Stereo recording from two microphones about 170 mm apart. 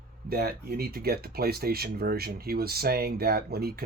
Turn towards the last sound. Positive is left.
turn(degrees=-65)  # may be behind; listen again after turning